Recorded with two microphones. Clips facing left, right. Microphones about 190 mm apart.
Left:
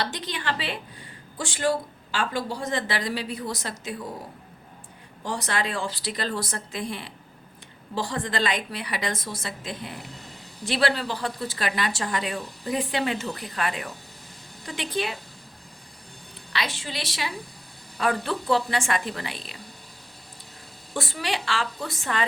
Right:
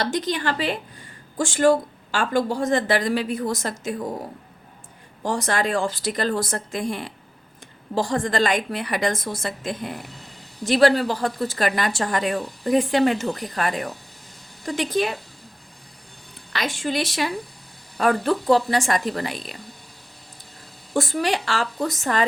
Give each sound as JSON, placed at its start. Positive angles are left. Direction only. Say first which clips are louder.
{"t": 0.0, "sound": "speech", "louder": "right 7 dB", "side_deg": -45}
{"t": 5.2, "sound": "speech", "louder": "right 5 dB", "side_deg": -45}
{"t": 16.5, "sound": "a woman's voice", "louder": "right 6 dB", "side_deg": -45}
{"t": 20.9, "sound": "speech", "louder": "right 7 dB", "side_deg": -45}